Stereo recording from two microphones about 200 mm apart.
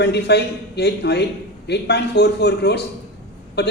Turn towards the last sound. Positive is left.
turn(degrees=55)  # may be behind; listen again after turning